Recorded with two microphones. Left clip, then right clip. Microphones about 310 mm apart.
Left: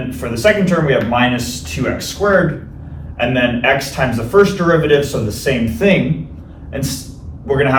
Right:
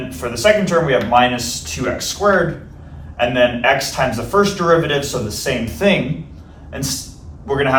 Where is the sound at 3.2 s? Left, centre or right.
Centre.